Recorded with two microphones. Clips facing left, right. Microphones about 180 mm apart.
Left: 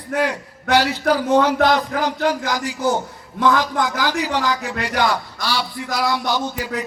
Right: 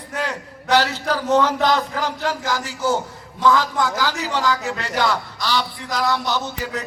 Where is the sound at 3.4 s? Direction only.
55° left (ahead or behind).